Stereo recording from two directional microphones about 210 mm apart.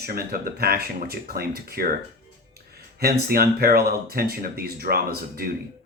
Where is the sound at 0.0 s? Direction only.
45° right (ahead or behind).